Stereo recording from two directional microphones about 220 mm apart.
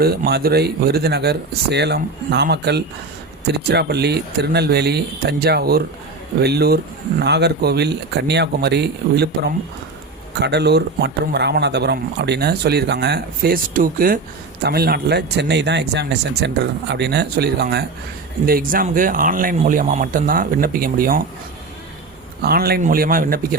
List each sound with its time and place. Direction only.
0.0 s speech: 45° right (ahead or behind)
22.4 s speech: 45° right (ahead or behind)